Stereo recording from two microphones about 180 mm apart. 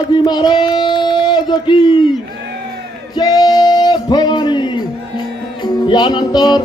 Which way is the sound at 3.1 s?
20° left (ahead or behind).